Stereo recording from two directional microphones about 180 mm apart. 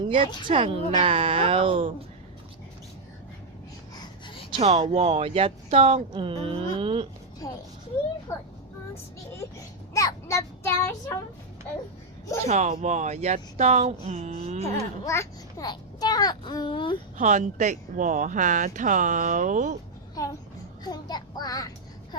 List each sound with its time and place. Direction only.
0.4 s speech: 30° right (ahead or behind)
3.9 s a sound: 25° left (ahead or behind)
4.6 s speech: 35° right (ahead or behind)
7.4 s a child's voice: 20° left (ahead or behind)
9.9 s child singing: 20° left (ahead or behind)
12.5 s speech: 40° right (ahead or behind)
14.6 s a child's voice: 15° left (ahead or behind)
17.2 s speech: 40° right (ahead or behind)
20.2 s a child's voice: 20° left (ahead or behind)